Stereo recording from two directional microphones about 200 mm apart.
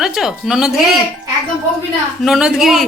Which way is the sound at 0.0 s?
Centre (ahead or behind).